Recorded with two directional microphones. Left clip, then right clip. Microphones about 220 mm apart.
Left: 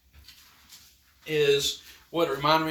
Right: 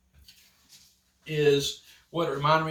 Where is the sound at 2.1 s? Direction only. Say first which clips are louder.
Left 1 dB; 25° left (ahead or behind).